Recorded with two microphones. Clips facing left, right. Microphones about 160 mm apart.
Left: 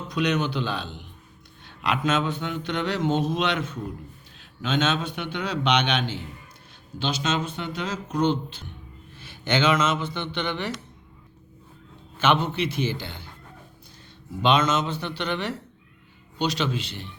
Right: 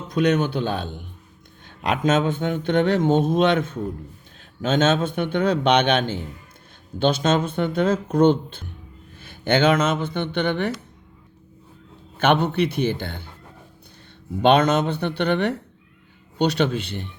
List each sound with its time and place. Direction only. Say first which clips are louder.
0.1 s mantra: right 5 dB; 50° right (ahead or behind)
9.1 s speech: right 5 dB; 50° right (ahead or behind)
12.2 s speech: right 4 dB; 55° right (ahead or behind)
14.4 s speech: right 5 dB; 55° right (ahead or behind)